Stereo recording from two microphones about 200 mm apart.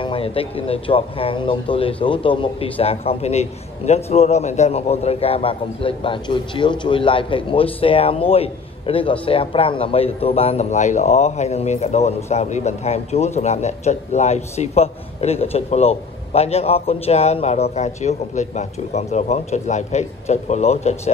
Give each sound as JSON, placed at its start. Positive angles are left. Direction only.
{"t": 0.0, "sound": "a man's voice", "side_deg": 25}